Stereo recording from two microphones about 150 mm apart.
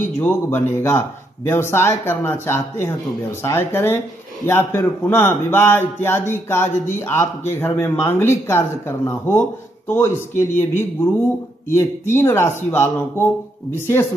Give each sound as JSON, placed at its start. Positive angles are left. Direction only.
{"t": 0.0, "sound": "speech", "side_deg": 15}